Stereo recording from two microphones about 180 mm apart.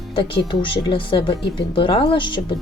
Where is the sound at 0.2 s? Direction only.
30° left (ahead or behind).